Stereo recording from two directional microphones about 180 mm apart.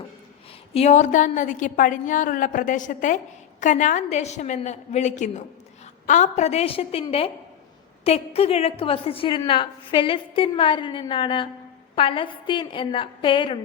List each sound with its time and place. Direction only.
0.7 s a woman's voice: 35° left (ahead or behind)